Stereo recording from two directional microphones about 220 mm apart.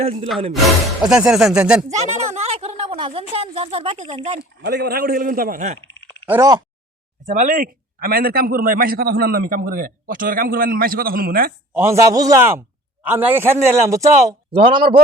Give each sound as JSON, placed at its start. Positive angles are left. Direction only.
{"t": 0.0, "sound": "a woman's voice", "side_deg": -30}
{"t": 1.0, "sound": "speech", "side_deg": 0}
{"t": 1.9, "sound": "a woman's voice", "side_deg": -30}
{"t": 4.4, "sound": "a man's voice", "side_deg": -45}
{"t": 6.2, "sound": "a man's voice", "side_deg": -10}
{"t": 7.3, "sound": "a man's voice", "side_deg": -35}
{"t": 11.7, "sound": "a man's voice", "side_deg": -10}